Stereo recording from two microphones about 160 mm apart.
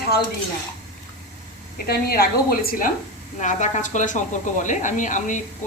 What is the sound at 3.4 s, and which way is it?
A woman's voice, 50° left (ahead or behind).